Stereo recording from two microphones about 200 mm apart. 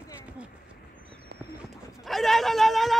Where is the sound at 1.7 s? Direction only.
Centre (ahead or behind).